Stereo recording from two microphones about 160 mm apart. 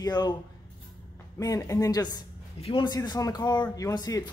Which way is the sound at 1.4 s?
20° left (ahead or behind).